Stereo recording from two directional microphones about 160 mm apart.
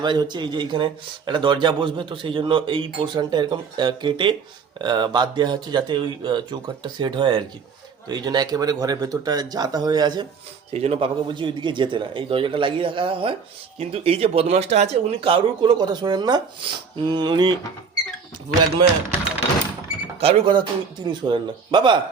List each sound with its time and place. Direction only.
0.0 s a man's voice: 30° right (ahead or behind)
10.7 s speech: 40° right (ahead or behind)
20.1 s a man's voice: 40° right (ahead or behind)